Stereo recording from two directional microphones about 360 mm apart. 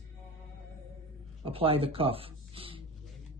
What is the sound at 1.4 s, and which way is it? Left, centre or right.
Speech, centre.